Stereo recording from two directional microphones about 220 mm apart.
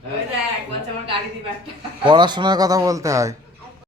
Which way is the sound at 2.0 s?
20° right (ahead or behind).